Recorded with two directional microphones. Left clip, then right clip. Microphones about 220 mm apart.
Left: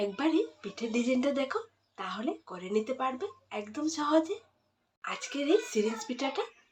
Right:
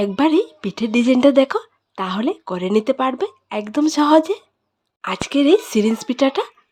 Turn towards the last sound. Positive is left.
turn(degrees=-55)  # may be behind; listen again after turning